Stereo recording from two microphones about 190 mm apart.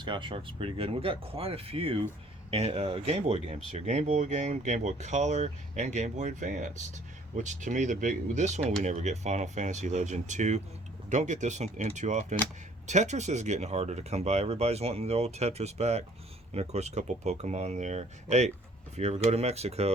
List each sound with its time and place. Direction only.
0.0 s speech: 25° right (ahead or behind)